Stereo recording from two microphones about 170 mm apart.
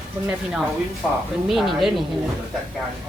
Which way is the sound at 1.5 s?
Centre (ahead or behind).